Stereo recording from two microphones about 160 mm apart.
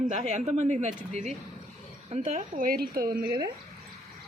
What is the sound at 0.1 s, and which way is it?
Speech, 50° right (ahead or behind).